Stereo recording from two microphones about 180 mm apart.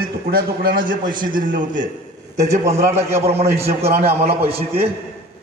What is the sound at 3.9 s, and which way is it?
Speech, 60° right (ahead or behind).